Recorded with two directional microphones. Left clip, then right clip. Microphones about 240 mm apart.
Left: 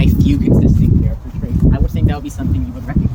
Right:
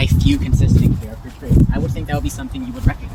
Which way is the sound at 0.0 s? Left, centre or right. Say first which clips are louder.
Left 3 dB; centre.